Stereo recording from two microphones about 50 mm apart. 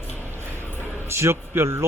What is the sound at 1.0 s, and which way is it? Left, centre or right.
Speech, right.